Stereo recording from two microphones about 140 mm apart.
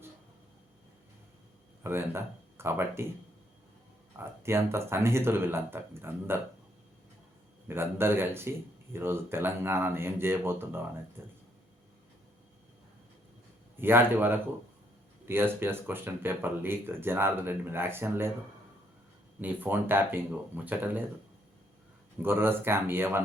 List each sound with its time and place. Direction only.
1.8 s speech: 15° right (ahead or behind)
4.2 s speech: 20° right (ahead or behind)
7.7 s speech: 15° right (ahead or behind)
13.7 s speech: 15° right (ahead or behind)
19.4 s speech: 15° right (ahead or behind)
22.2 s speech: 15° right (ahead or behind)